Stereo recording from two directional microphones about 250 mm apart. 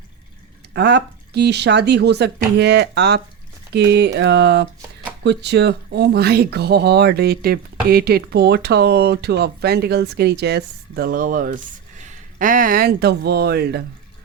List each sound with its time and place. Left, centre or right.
0.7 s speech: right